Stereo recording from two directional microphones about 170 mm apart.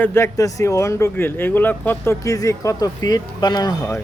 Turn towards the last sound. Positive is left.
turn(degrees=25)  # may be behind; listen again after turning